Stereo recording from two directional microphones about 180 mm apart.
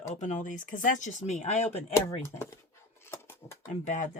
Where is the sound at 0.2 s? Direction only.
45° left (ahead or behind).